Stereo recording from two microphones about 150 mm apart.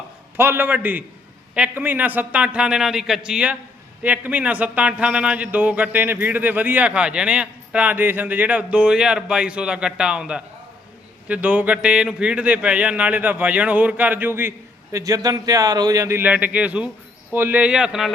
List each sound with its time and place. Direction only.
0.3 s a man's voice: 15° right (ahead or behind)